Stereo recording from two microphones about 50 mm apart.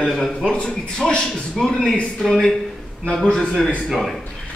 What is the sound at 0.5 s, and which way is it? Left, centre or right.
A man's voice, centre.